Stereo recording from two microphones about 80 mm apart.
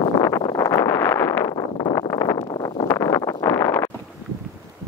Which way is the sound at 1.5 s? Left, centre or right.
Left.